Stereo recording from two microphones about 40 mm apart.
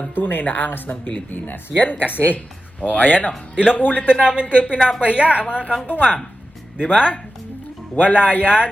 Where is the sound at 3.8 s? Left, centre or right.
Left.